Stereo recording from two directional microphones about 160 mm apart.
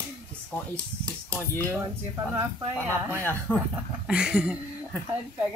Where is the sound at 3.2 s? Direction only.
10° left (ahead or behind).